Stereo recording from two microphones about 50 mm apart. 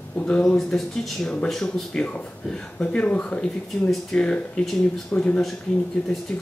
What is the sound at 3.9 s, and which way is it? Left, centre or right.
Speech, centre.